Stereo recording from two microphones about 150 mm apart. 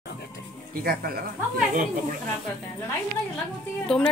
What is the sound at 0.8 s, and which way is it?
Speech, 80° right.